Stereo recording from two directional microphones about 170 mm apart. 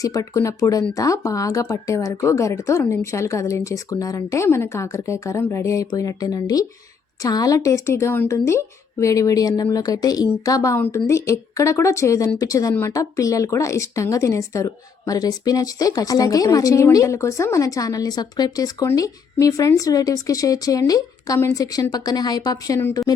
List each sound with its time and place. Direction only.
0.0 s a woman's voice: 20° left (ahead or behind)